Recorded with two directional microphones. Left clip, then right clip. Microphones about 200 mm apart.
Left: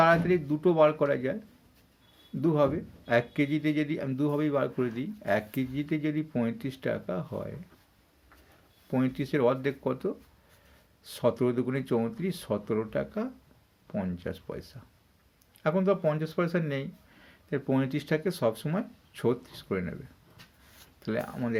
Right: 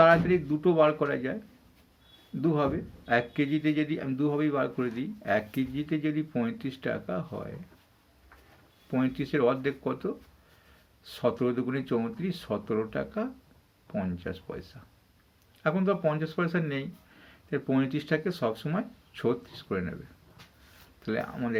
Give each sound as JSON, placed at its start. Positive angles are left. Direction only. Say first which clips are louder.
{"t": 0.0, "sound": "speech", "louder": "right 2 dB", "side_deg": 35}
{"t": 2.4, "sound": "speech", "louder": "left 2 dB", "side_deg": 35}
{"t": 8.9, "sound": "speech", "louder": "even", "side_deg": 35}
{"t": 21.0, "sound": "speech", "louder": "even", "side_deg": 35}